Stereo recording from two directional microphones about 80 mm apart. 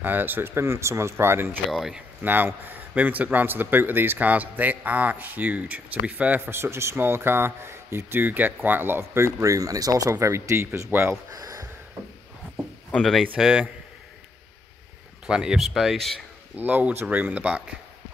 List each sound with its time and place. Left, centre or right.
0.0 s speech: right
1.7 s speech: centre
2.2 s a man's voice: right
6.4 s speech: right
11.3 s a sound: right
13.4 s speech: centre
15.2 s speech: centre
16.5 s a man's voice: right